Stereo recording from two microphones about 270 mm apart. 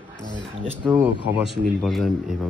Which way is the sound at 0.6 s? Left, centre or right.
Centre.